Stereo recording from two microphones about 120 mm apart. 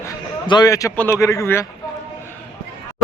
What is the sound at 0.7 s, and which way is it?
Speech, 30° left (ahead or behind).